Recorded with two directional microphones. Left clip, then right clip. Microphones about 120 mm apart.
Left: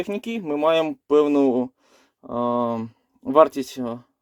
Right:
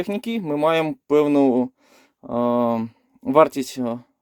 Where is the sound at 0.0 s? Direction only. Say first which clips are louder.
Right 2 dB; 30° right (ahead or behind).